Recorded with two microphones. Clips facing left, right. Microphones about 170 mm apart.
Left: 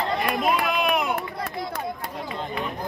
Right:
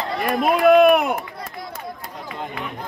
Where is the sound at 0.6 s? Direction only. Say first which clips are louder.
Right 11 dB; 55° right (ahead or behind).